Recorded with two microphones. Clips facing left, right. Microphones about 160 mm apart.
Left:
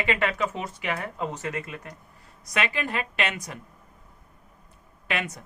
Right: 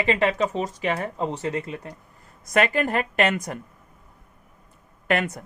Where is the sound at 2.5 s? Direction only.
50° right (ahead or behind).